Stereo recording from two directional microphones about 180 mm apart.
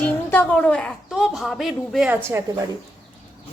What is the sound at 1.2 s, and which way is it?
Speech, centre (ahead or behind).